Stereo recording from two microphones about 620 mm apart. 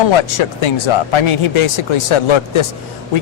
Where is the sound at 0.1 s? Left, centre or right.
Left.